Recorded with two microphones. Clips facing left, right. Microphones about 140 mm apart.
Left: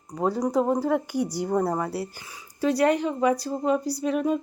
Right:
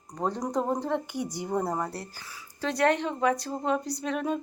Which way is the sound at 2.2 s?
15° left (ahead or behind).